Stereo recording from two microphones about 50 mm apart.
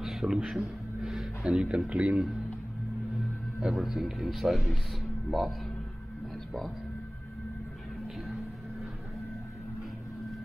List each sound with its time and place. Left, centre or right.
0.0 s a sound: centre
1.4 s a man's voice: right
3.6 s speech: centre
6.3 s music: centre